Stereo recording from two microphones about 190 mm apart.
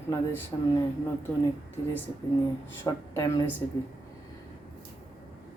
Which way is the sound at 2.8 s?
15° left (ahead or behind).